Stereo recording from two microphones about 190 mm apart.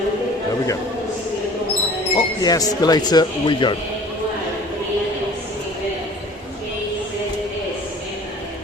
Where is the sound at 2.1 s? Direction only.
20° left (ahead or behind).